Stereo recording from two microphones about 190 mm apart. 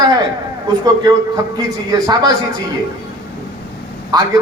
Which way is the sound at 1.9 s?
20° right (ahead or behind).